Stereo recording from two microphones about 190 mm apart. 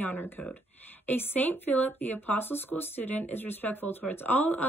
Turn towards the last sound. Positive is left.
turn(degrees=10)  # may be behind; listen again after turning